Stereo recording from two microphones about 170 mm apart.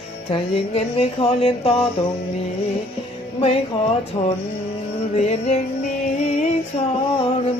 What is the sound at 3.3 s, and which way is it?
Music, 35° left (ahead or behind).